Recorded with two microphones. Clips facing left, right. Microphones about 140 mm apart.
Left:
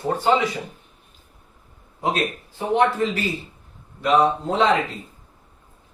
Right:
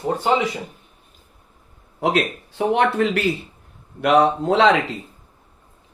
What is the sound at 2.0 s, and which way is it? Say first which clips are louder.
Speech: right 3 dB; 75° right (ahead or behind).